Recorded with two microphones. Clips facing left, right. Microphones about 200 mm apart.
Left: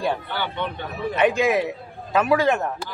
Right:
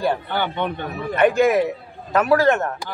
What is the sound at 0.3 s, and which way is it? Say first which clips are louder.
Speech: right 4 dB; 50° right (ahead or behind).